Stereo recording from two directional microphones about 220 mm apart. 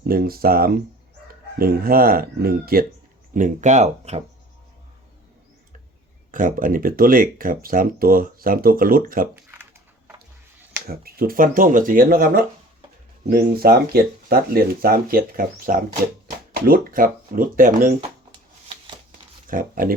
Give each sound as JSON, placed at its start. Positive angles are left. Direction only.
{"t": 0.0, "sound": "speech", "side_deg": -45}
{"t": 6.3, "sound": "speech", "side_deg": -40}
{"t": 9.3, "sound": "a sound", "side_deg": -10}
{"t": 10.8, "sound": "speech", "side_deg": -45}
{"t": 19.5, "sound": "speech", "side_deg": -40}